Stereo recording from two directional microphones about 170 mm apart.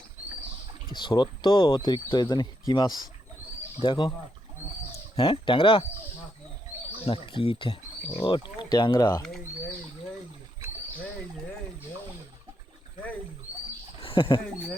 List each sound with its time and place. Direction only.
0.9 s speech: 25° left (ahead or behind)
7.0 s speech: 30° left (ahead or behind)
9.2 s speech: 5° left (ahead or behind)
14.0 s a sound: 30° left (ahead or behind)